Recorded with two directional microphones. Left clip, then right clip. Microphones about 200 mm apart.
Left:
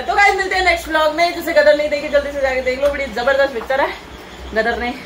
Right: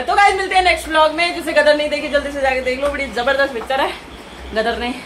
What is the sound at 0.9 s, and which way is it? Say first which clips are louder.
Speech: right 1 dB; 15° left (ahead or behind).